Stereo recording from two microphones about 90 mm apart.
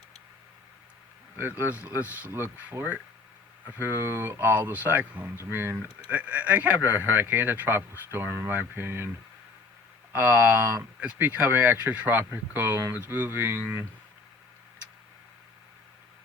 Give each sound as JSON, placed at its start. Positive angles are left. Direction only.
{"t": 1.4, "sound": "speech", "side_deg": -20}
{"t": 10.1, "sound": "speech", "side_deg": -25}